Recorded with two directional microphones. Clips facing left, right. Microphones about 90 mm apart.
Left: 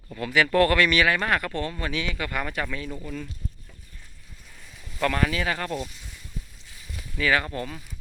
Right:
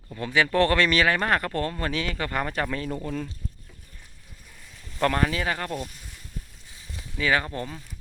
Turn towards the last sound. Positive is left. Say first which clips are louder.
# left 1 dB
turn(degrees=-25)  # may be behind; listen again after turning